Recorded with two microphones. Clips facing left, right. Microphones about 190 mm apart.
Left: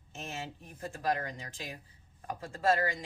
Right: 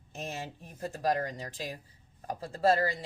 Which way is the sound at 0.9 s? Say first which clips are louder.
Right 3 dB; 40° right (ahead or behind).